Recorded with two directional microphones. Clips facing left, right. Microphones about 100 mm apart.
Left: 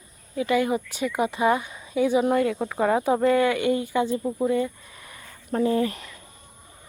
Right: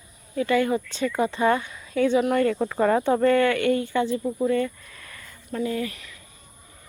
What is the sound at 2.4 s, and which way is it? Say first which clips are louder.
Speech: right 2 dB; 5° left (ahead or behind).